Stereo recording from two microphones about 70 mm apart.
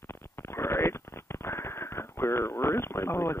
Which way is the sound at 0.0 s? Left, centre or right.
Left.